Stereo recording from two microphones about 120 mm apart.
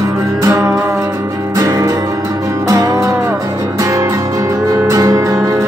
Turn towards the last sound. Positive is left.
turn(degrees=-30)  # may be behind; listen again after turning